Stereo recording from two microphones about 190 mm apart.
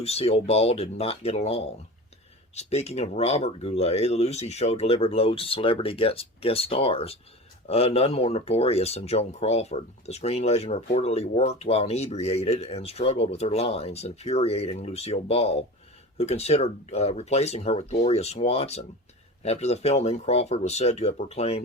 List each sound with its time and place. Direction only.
0.0 s speech: 35° left (ahead or behind)